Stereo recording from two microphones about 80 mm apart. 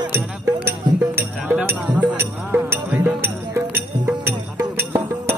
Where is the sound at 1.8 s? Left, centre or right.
Centre.